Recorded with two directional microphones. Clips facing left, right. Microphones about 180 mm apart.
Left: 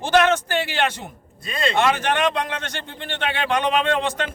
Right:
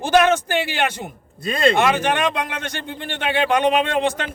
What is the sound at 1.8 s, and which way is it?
Speech, 10° right (ahead or behind).